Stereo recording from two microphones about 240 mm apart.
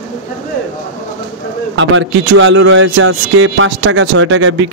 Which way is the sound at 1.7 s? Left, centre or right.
Right.